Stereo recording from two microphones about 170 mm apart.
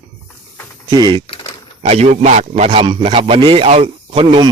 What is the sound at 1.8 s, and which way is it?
A man's voice, 40° right (ahead or behind).